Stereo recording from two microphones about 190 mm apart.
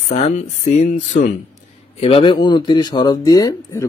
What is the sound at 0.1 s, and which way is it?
A man's voice, 35° left (ahead or behind).